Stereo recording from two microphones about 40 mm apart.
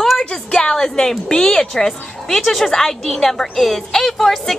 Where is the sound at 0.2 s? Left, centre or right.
Left.